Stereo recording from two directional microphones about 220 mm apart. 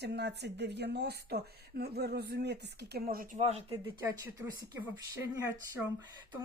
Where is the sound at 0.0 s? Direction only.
50° right (ahead or behind).